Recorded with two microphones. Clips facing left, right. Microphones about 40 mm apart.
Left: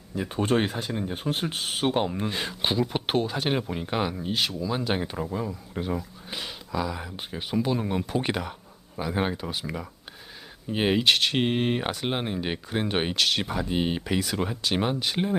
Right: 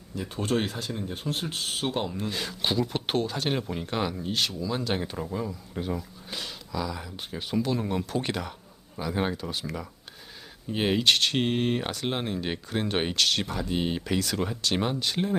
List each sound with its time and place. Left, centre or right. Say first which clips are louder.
0.2 s speech: left 3 dB; left